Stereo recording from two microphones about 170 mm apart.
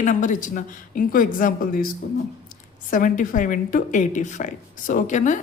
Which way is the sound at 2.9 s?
50° left (ahead or behind).